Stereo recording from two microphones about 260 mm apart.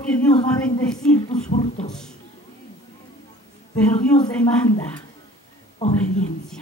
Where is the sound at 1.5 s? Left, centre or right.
Left.